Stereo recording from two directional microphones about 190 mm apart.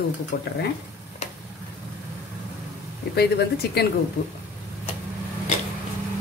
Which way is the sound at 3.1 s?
55° left (ahead or behind).